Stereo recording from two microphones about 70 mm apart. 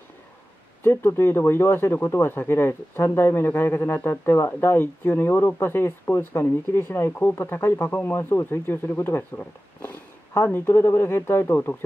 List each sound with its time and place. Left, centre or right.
0.8 s speech: left